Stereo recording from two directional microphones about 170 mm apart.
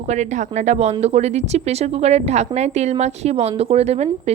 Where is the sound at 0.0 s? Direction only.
45° right (ahead or behind).